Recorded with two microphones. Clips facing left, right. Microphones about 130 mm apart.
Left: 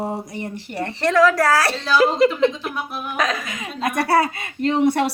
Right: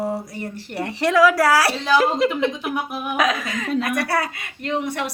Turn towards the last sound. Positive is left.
turn(degrees=35)  # may be behind; listen again after turning